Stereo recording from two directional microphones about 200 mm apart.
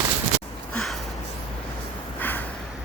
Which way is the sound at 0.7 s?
Centre (ahead or behind).